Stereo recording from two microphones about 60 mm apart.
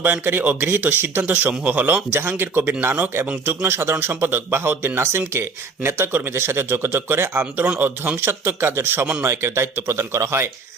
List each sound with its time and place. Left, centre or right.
0.0 s speech: right
2.0 s speech: right